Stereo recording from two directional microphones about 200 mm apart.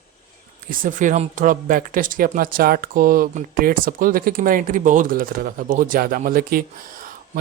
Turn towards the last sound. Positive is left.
turn(degrees=-45)  # may be behind; listen again after turning